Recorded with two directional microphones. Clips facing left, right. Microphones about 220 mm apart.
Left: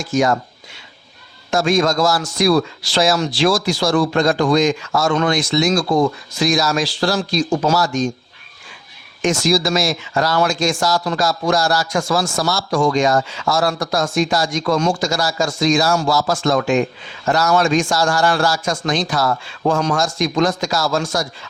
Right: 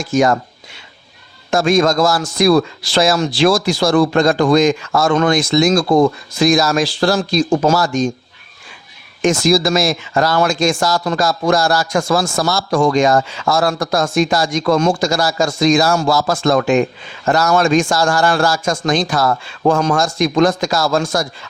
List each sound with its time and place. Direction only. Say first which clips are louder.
0.1 s a man's voice: right 3 dB; 55° right (ahead or behind)
1.5 s a man's voice: right 3 dB; 55° right (ahead or behind)
9.2 s a man's voice: right 3 dB; 55° right (ahead or behind)